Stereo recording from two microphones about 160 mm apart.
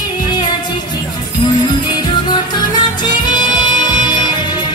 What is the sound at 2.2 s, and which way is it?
Music, 30° left (ahead or behind).